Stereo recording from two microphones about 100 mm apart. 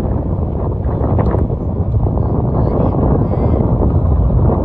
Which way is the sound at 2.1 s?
40° left (ahead or behind).